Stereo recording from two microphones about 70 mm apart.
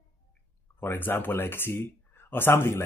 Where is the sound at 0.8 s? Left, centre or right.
Left.